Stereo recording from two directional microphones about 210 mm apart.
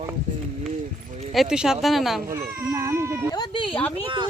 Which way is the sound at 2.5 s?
10° right (ahead or behind).